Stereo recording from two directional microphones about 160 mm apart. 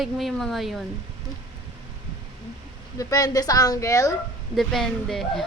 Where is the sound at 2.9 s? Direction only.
20° left (ahead or behind).